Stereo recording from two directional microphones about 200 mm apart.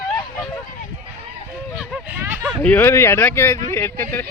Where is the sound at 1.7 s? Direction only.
5° right (ahead or behind).